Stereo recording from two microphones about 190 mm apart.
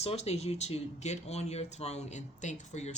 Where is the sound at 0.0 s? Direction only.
35° left (ahead or behind).